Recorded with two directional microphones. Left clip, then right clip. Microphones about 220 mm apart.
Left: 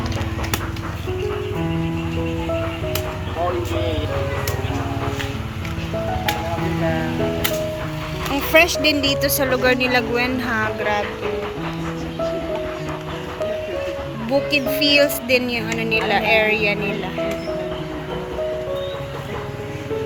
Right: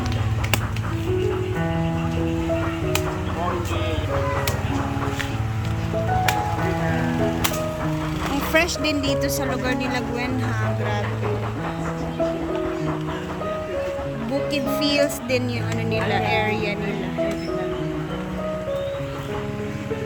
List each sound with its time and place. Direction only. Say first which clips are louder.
8.5 s a woman's voice: left 7 dB; 10° right (ahead or behind)
14.5 s speech: left 5 dB; 5° right (ahead or behind)